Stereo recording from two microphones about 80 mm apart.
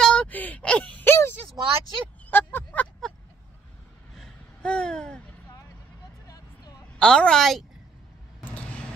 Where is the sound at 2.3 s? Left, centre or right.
Left.